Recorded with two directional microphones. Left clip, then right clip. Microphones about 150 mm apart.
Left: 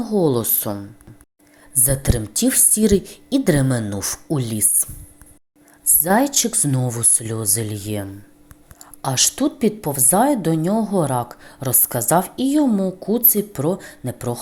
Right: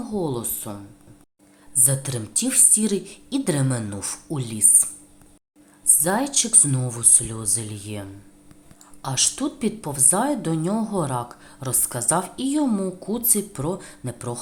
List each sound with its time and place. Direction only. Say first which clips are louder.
0.0 s a woman's voice: left 9 dB; 30° left (ahead or behind)
1.7 s a woman's voice: left 3 dB; 30° left (ahead or behind)